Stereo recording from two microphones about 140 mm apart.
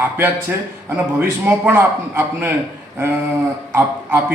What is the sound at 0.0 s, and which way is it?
A man's voice, 15° right (ahead or behind).